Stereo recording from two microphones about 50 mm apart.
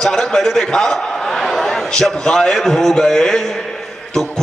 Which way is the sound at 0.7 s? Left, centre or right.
Centre.